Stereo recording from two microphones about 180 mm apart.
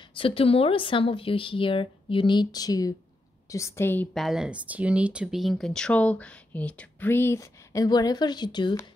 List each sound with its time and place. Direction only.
0.1 s speech: 30° left (ahead or behind)